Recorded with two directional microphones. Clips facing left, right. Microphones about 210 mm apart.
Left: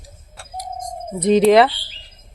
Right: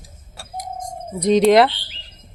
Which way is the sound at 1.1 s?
5° left (ahead or behind).